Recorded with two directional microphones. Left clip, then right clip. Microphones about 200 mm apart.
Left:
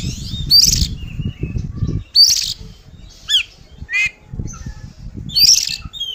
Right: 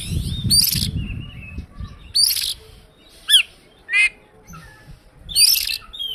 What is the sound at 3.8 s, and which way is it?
Bird, 25° right (ahead or behind).